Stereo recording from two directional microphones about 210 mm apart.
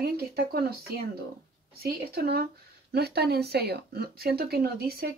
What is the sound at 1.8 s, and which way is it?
Speech, 45° right (ahead or behind).